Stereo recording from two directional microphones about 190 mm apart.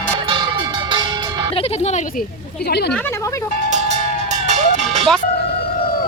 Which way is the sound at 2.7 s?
60° left (ahead or behind).